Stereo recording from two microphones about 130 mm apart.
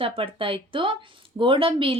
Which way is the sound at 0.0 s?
45° right (ahead or behind).